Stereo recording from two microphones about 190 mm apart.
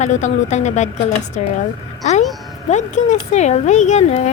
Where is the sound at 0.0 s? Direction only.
40° left (ahead or behind).